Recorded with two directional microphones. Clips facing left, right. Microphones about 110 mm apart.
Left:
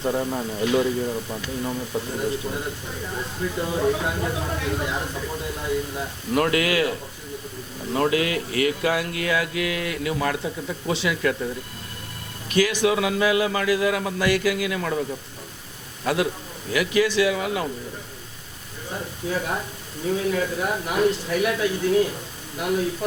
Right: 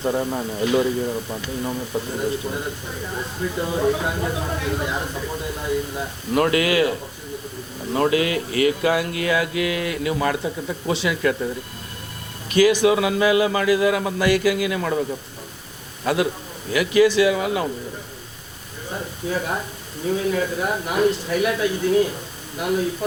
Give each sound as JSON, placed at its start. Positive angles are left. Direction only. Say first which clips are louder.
{"t": 0.0, "sound": "speech", "louder": "right 2 dB", "side_deg": -30}
{"t": 0.6, "sound": "speech", "louder": "right 2 dB", "side_deg": -15}
{"t": 1.0, "sound": "speech", "louder": "right 2 dB", "side_deg": -35}
{"t": 2.0, "sound": "speech", "louder": "right 2 dB", "side_deg": -20}
{"t": 12.5, "sound": "speech", "louder": "right 5 dB", "side_deg": -10}
{"t": 16.0, "sound": "speech", "louder": "right 2 dB", "side_deg": -15}
{"t": 18.9, "sound": "a sound", "louder": "right 2 dB", "side_deg": -25}
{"t": 20.1, "sound": "speech", "louder": "right 2 dB", "side_deg": -20}